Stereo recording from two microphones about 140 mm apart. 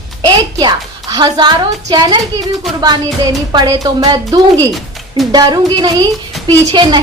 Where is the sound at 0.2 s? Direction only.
30° right (ahead or behind).